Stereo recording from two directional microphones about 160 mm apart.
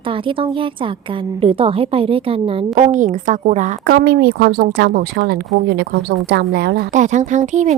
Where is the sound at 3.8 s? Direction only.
80° right.